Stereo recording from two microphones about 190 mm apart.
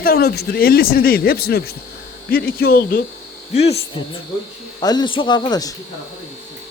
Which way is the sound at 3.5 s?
35° left (ahead or behind).